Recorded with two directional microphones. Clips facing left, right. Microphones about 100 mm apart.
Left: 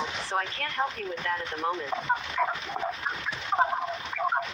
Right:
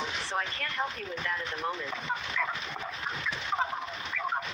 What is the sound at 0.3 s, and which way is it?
Speech, 50° left (ahead or behind).